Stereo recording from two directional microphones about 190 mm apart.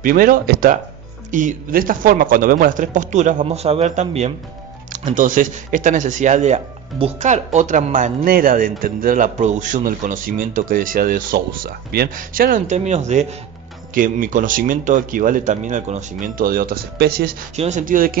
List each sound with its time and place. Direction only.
0.0 s speech: 50° right (ahead or behind)
17.6 s speech: 40° right (ahead or behind)